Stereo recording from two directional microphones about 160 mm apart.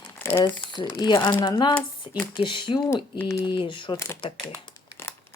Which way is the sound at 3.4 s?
30° left (ahead or behind).